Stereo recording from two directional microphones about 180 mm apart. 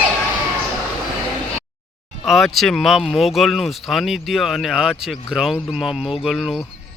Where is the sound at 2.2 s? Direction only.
Centre (ahead or behind).